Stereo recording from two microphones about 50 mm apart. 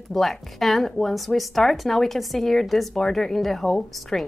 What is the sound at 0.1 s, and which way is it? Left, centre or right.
A woman's voice, centre.